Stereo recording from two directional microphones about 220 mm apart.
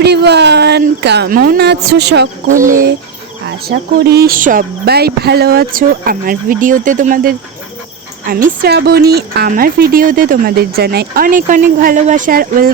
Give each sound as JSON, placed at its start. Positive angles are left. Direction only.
{"t": 0.0, "sound": "speech", "side_deg": -50}
{"t": 2.5, "sound": "a woman's voice", "side_deg": -35}